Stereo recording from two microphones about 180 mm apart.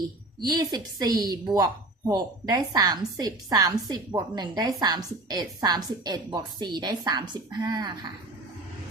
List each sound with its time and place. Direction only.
0.3 s a woman's voice: 25° right (ahead or behind)